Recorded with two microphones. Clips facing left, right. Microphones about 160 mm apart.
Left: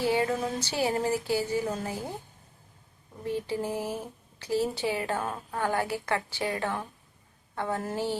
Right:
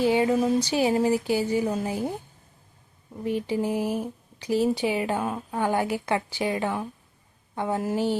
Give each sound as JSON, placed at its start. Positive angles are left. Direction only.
{"t": 0.0, "sound": "speech", "side_deg": -15}
{"t": 3.2, "sound": "speech", "side_deg": -15}